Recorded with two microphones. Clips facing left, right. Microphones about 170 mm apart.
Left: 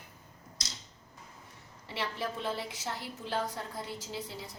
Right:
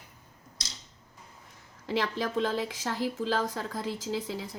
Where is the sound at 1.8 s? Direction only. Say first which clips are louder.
Right 6 dB; 90° right.